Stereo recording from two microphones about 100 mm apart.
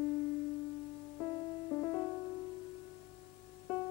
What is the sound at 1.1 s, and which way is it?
Music, 25° left (ahead or behind).